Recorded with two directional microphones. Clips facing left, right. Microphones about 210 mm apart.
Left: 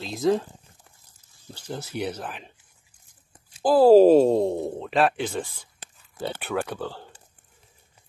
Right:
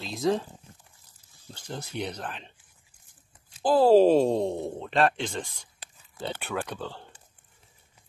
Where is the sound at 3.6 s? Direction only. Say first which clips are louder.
Left 4 dB; 10° left (ahead or behind).